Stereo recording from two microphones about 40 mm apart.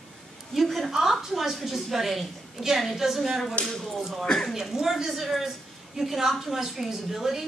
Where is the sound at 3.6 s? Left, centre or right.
Left.